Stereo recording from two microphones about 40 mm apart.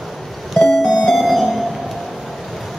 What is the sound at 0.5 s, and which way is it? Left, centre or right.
Music, centre.